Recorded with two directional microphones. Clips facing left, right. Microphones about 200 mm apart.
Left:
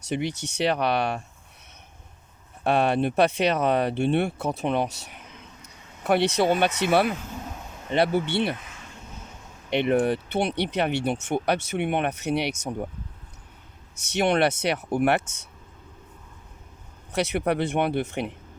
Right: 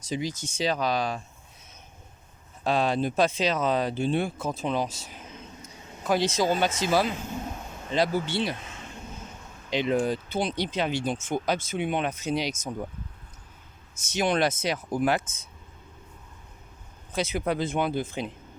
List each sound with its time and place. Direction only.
0.0 s speech: 65° left (ahead or behind)
2.6 s speech: 65° left (ahead or behind)
9.6 s speech: 65° left (ahead or behind)
13.9 s speech: 65° left (ahead or behind)
17.1 s speech: 70° left (ahead or behind)